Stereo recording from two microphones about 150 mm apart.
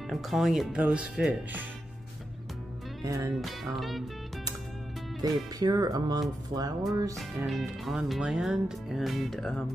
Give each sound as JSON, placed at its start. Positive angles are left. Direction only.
{"t": 0.1, "sound": "speech", "side_deg": 0}
{"t": 3.0, "sound": "speech", "side_deg": -20}
{"t": 3.3, "sound": "speech", "side_deg": 0}
{"t": 5.2, "sound": "speech", "side_deg": -25}
{"t": 7.4, "sound": "speech", "side_deg": 0}